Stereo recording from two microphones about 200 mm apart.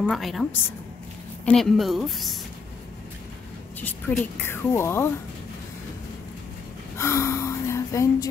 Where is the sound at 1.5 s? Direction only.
Centre (ahead or behind).